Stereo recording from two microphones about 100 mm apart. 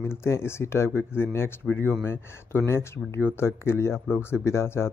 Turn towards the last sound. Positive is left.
turn(degrees=25)  # may be behind; listen again after turning